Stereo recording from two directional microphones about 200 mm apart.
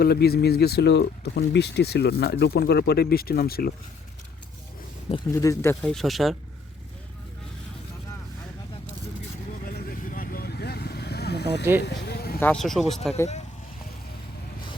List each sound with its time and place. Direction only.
0.0 s speech: 50° left (ahead or behind)
5.1 s speech: 15° left (ahead or behind)
5.8 s speech: centre (ahead or behind)
9.6 s vehicle: 45° left (ahead or behind)
11.8 s a sound: 55° left (ahead or behind)
12.4 s speech: 5° left (ahead or behind)